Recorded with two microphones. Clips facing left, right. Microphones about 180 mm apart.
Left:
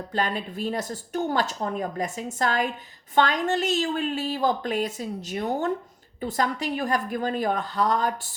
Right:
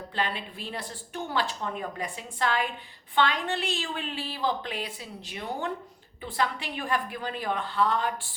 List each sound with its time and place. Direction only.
0.1 s a woman's voice: 45° left (ahead or behind)